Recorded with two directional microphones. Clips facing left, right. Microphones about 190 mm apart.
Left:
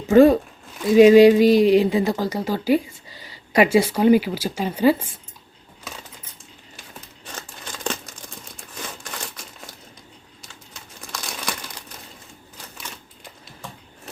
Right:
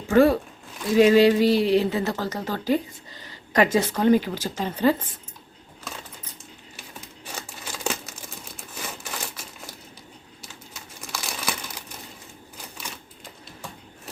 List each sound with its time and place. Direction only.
0.1 s speech: 20° left (ahead or behind)
7.3 s crumpling: 10° right (ahead or behind)
11.1 s crumpling: 5° right (ahead or behind)